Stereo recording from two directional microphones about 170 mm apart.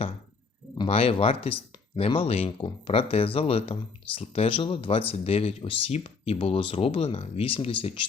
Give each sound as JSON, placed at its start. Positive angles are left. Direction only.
{"t": 0.8, "sound": "speech", "side_deg": 35}